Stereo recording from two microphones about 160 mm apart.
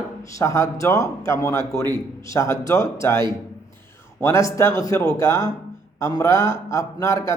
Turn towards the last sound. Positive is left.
turn(degrees=20)  # may be behind; listen again after turning